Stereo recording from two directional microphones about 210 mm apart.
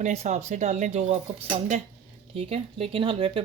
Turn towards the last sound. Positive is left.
turn(degrees=-25)  # may be behind; listen again after turning